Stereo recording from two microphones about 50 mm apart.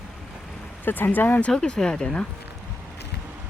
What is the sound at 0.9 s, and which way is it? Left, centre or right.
Speech, left.